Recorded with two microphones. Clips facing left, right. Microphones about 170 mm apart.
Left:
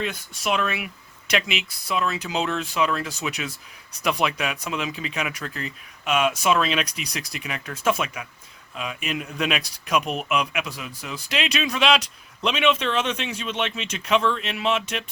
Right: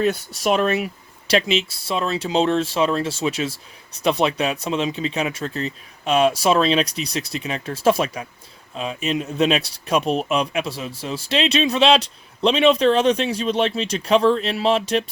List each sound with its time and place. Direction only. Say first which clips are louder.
0.4 s speech: right 6 dB; 40° right (ahead or behind)